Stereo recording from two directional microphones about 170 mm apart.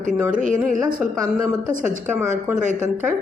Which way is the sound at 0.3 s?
50° right (ahead or behind).